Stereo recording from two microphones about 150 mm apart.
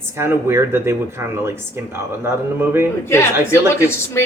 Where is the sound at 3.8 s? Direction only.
15° left (ahead or behind).